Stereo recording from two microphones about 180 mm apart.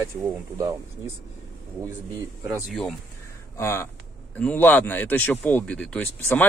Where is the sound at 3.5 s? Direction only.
15° left (ahead or behind).